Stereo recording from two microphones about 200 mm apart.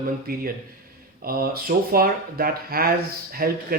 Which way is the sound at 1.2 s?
50° right (ahead or behind).